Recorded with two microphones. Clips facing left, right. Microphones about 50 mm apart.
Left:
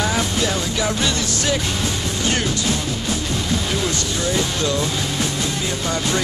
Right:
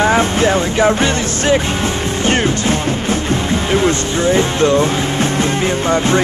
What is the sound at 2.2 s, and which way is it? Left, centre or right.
Music, right.